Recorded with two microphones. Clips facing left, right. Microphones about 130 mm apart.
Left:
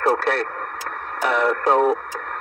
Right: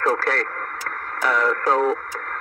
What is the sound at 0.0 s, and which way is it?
Speech, 20° left (ahead or behind).